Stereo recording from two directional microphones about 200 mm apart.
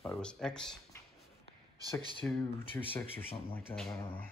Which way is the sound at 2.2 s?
10° left (ahead or behind).